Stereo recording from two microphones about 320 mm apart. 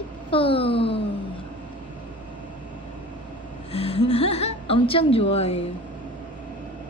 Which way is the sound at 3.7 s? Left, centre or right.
Centre.